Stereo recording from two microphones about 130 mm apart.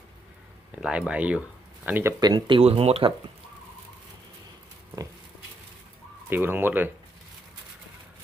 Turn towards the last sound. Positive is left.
turn(degrees=-15)  # may be behind; listen again after turning